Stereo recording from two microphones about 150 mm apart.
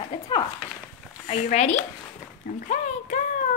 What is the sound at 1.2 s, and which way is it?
Speech, 50° left (ahead or behind).